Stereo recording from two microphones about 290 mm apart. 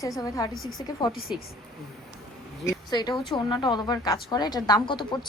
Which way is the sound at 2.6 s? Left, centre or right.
Centre.